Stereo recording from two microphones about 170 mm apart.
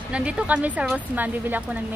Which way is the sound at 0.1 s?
5° right (ahead or behind).